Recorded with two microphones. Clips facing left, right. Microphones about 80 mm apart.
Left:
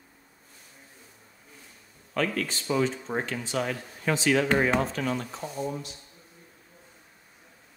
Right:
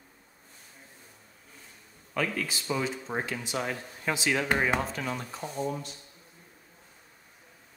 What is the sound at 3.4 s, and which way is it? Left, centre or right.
Speech, centre.